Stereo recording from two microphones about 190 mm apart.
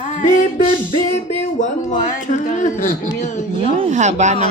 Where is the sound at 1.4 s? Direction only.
40° left (ahead or behind).